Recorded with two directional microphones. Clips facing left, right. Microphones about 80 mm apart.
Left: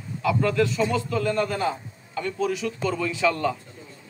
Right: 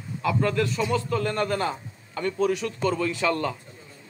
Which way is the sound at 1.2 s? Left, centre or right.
Right.